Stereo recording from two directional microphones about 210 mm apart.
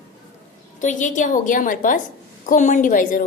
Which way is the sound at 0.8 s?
35° left (ahead or behind).